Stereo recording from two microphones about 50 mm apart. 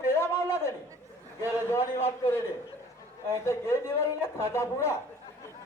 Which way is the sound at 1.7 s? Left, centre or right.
Left.